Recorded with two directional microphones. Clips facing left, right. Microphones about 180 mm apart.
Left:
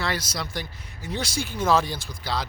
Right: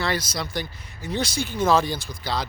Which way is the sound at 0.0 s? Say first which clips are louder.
Right 3 dB; 5° left (ahead or behind).